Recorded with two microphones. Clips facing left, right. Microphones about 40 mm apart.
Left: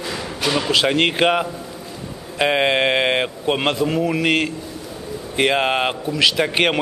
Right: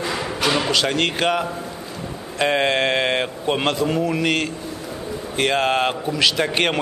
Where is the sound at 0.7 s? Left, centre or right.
Centre.